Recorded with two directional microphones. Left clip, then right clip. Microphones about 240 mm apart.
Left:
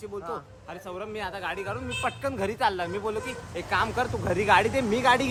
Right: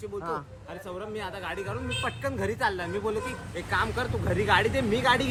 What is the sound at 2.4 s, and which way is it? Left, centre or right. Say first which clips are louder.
Speech: left 2 dB; centre.